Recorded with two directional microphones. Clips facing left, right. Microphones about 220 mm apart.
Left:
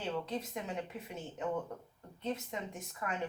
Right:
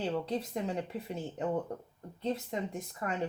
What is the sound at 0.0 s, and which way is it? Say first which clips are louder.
Speech: right 4 dB; 35° right (ahead or behind).